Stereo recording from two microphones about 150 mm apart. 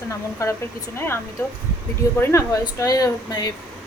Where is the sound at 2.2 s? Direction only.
15° left (ahead or behind).